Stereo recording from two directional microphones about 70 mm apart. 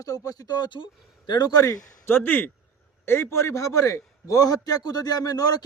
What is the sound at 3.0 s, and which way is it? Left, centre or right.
A man's voice, left.